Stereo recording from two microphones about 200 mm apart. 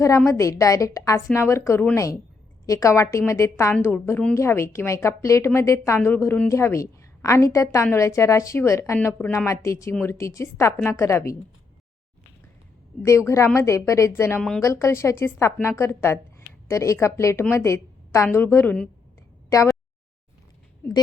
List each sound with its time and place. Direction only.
0.3 s a woman's voice: 15° left (ahead or behind)
13.1 s a woman's voice: 15° left (ahead or behind)